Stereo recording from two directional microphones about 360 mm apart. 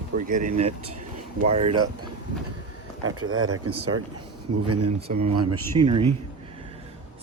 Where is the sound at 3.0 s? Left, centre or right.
Right.